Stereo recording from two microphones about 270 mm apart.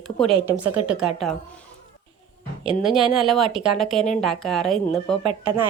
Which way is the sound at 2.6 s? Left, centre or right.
Centre.